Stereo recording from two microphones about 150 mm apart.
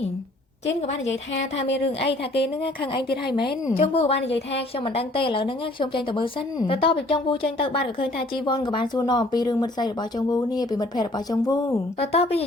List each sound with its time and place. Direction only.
3.2 s speech: 30° left (ahead or behind)
11.9 s a woman's voice: 40° left (ahead or behind)